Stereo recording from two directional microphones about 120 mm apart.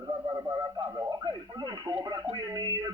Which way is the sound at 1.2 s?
40° right (ahead or behind).